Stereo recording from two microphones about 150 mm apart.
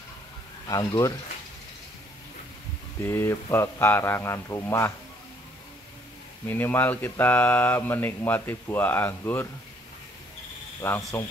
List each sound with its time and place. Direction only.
0.7 s speech: 20° left (ahead or behind)
3.0 s speech: 15° left (ahead or behind)
6.4 s speech: 15° left (ahead or behind)
10.8 s speech: 20° left (ahead or behind)